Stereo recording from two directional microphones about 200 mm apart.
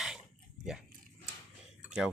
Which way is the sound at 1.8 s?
5° right (ahead or behind).